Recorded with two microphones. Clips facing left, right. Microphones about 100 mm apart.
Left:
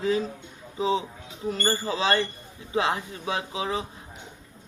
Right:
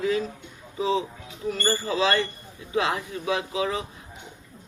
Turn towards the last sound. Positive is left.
turn(degrees=30)  # may be behind; listen again after turning